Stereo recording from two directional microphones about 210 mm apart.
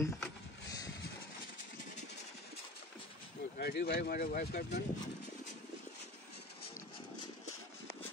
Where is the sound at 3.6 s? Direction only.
50° left (ahead or behind).